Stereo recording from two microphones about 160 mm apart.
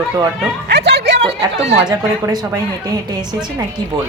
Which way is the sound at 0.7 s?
90° right.